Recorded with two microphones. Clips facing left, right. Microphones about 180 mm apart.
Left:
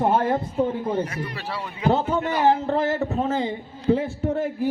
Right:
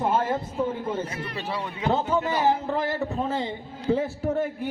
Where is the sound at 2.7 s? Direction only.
35° left (ahead or behind).